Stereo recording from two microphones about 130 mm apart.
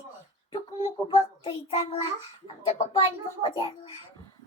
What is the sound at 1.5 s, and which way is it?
Child singing, 45° left (ahead or behind).